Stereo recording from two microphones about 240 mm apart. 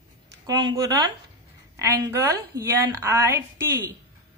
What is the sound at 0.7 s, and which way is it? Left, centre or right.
A woman's voice, centre.